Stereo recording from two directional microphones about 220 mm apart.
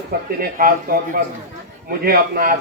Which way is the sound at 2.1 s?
40° right (ahead or behind).